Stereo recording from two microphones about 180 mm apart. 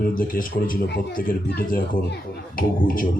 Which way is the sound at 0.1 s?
50° left (ahead or behind).